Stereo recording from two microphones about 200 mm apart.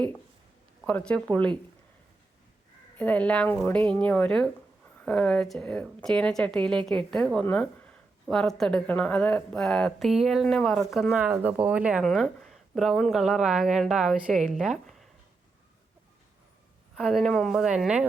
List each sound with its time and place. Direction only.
0.9 s a woman's voice: 5° left (ahead or behind)
3.0 s a woman's voice: 5° left (ahead or behind)
16.9 s a woman's voice: centre (ahead or behind)